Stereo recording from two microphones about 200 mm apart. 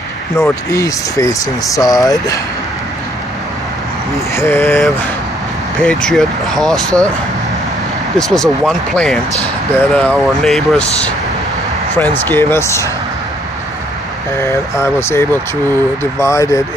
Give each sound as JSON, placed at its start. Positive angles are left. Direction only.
{"t": 0.4, "sound": "speech", "side_deg": 15}
{"t": 4.4, "sound": "speech", "side_deg": 10}
{"t": 8.2, "sound": "speech", "side_deg": 0}
{"t": 11.9, "sound": "speech", "side_deg": 10}
{"t": 14.4, "sound": "speech", "side_deg": 15}